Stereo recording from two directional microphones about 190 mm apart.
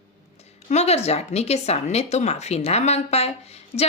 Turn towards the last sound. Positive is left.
turn(degrees=35)  # may be behind; listen again after turning